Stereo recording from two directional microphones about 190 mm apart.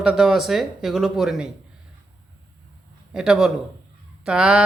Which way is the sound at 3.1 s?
5° right (ahead or behind).